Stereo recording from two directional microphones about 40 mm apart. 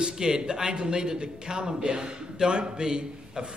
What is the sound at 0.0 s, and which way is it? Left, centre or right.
A man's voice, centre.